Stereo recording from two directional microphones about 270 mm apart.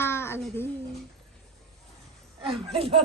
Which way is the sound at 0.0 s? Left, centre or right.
Centre.